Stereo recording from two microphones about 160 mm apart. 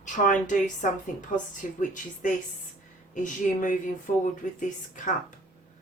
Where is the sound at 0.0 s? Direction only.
50° left (ahead or behind).